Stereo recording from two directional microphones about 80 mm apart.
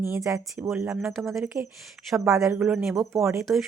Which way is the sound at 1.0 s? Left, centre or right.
Centre.